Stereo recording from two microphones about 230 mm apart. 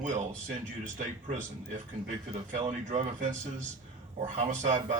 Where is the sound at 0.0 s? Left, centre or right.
Right.